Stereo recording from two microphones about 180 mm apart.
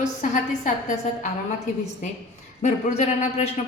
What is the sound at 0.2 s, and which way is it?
A woman's voice, 45° left (ahead or behind).